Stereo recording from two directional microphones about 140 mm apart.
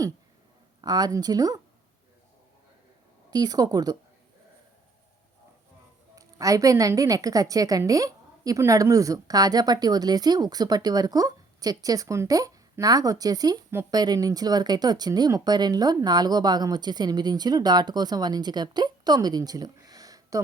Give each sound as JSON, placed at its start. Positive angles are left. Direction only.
{"t": 0.8, "sound": "a woman's voice", "side_deg": -30}
{"t": 3.2, "sound": "a woman's voice", "side_deg": -30}
{"t": 6.1, "sound": "a woman's voice", "side_deg": -25}